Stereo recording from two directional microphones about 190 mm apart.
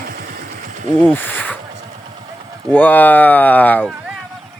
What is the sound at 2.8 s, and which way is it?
Speech, 10° left (ahead or behind).